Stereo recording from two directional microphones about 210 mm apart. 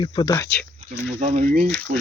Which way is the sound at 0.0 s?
20° left (ahead or behind).